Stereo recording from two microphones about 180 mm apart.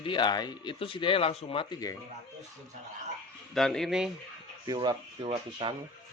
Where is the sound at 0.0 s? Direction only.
25° left (ahead or behind).